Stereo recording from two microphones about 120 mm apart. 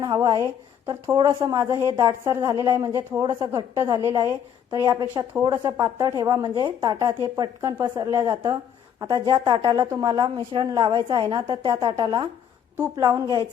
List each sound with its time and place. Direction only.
0.0 s speech: 35° right (ahead or behind)
0.4 s speech: 25° right (ahead or behind)
1.3 s a woman's voice: 40° right (ahead or behind)
1.5 s a woman's voice: 25° right (ahead or behind); by 12.3 s 40° right (ahead or behind)
13.0 s a woman's voice: 30° right (ahead or behind)